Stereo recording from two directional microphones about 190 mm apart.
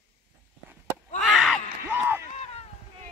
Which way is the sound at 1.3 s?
Centre (ahead or behind).